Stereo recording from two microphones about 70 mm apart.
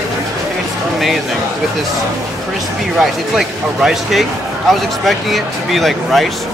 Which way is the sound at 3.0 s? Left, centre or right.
Centre.